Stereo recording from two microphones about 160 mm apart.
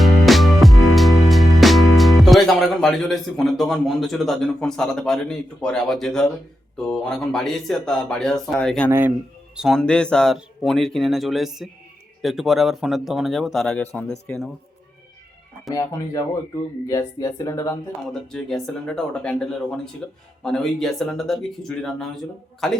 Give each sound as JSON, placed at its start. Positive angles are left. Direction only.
{"t": 0.0, "sound": "music", "side_deg": 0}
{"t": 6.7, "sound": "speech", "side_deg": 5}
{"t": 8.9, "sound": "speech", "side_deg": -15}
{"t": 9.6, "sound": "speech", "side_deg": 0}
{"t": 16.9, "sound": "speech", "side_deg": 20}
{"t": 18.1, "sound": "speech", "side_deg": 5}